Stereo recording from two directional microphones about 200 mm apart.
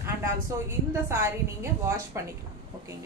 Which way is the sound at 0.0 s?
15° right (ahead or behind).